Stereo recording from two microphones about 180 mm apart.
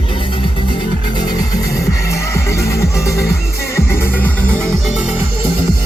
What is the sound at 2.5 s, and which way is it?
Music, 15° left (ahead or behind).